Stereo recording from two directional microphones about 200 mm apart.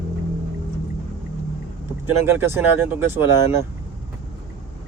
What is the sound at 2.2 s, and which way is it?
Speech, 10° right (ahead or behind).